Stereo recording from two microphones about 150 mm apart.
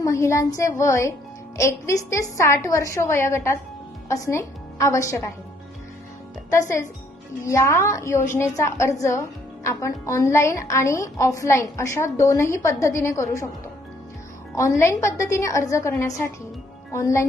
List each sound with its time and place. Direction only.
0.0 s a woman's voice: 20° left (ahead or behind)
6.5 s a woman's voice: 20° left (ahead or behind)
14.5 s a woman's voice: 20° left (ahead or behind)